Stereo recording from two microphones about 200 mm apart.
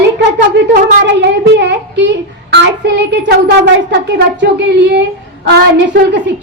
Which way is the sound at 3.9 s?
60° right (ahead or behind).